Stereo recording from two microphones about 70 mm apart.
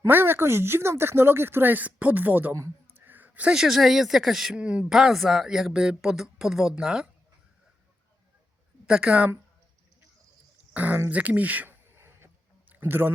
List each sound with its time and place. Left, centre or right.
0.1 s speech: right
2.9 s a sound: right
3.5 s speech: centre
4.5 s speech: centre
8.9 s speech: centre
10.8 s speech: right
11.9 s music: right
12.6 s a sound: right